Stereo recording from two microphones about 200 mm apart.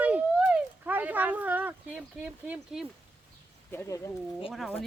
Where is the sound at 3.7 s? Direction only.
15° left (ahead or behind).